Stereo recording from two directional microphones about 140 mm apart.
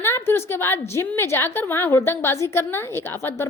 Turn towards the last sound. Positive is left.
turn(degrees=20)  # may be behind; listen again after turning